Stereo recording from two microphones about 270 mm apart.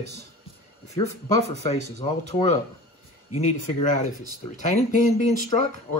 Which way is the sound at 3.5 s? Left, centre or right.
Left.